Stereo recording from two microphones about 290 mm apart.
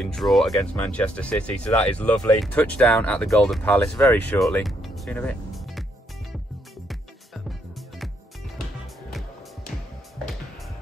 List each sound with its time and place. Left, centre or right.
0.0 s speech: centre
6.9 s music: centre